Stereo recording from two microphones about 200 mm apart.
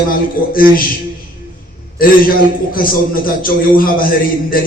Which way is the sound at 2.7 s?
45° left (ahead or behind).